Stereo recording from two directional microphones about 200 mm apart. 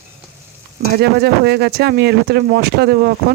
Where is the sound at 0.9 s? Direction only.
50° right (ahead or behind).